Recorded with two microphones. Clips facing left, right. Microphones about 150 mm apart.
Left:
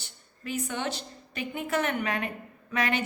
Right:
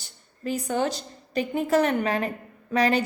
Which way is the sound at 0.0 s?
35° right (ahead or behind).